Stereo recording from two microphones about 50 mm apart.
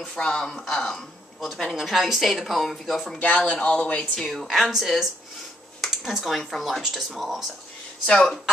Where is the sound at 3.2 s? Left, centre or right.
Left.